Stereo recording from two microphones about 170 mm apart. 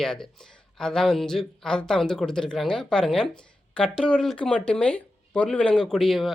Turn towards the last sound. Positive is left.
turn(degrees=0)  # may be behind; listen again after turning